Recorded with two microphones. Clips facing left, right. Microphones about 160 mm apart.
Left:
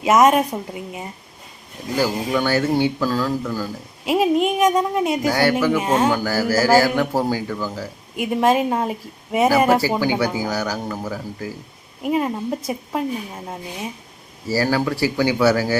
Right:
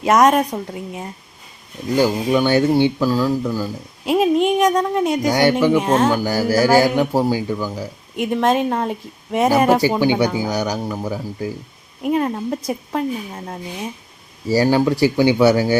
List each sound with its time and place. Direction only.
0.0 s speech: 5° left (ahead or behind)
2.0 s a man's voice: 20° right (ahead or behind)
4.0 s speech: centre (ahead or behind)
5.3 s speech: 20° right (ahead or behind)
5.7 s speech: 5° left (ahead or behind)
6.1 s a man's voice: 15° right (ahead or behind)
8.1 s speech: 5° left (ahead or behind)
10.0 s speech: 20° right (ahead or behind)
12.0 s speech: centre (ahead or behind)
14.4 s speech: 20° right (ahead or behind)